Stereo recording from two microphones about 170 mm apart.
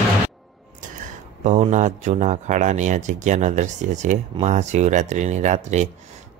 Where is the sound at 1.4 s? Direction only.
45° right (ahead or behind).